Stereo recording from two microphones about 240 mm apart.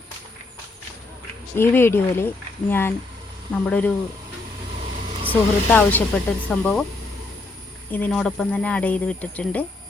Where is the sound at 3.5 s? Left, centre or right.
Centre.